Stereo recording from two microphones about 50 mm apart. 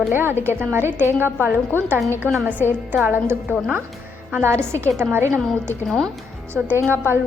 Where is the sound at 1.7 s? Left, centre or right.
Left.